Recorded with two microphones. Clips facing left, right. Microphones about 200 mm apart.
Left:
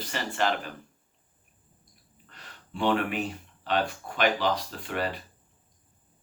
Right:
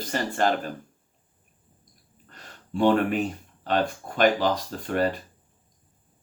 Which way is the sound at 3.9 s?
45° right (ahead or behind).